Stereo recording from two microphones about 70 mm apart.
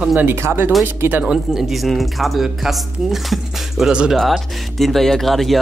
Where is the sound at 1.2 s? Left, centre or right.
Centre.